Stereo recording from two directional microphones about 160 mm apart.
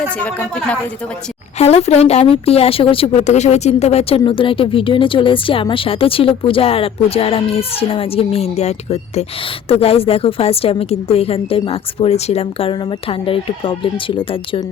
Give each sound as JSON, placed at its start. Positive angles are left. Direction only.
{"t": 0.3, "sound": "speech", "side_deg": 10}
{"t": 1.5, "sound": "speech", "side_deg": 45}